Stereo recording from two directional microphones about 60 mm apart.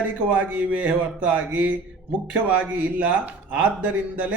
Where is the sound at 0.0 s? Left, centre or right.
Right.